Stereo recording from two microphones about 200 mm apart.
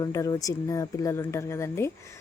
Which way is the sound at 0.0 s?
15° left (ahead or behind).